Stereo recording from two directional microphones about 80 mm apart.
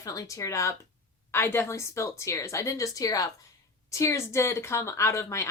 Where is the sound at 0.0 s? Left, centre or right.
Left.